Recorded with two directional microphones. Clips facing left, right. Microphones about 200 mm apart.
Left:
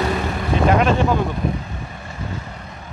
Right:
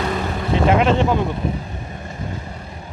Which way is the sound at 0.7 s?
20° right (ahead or behind).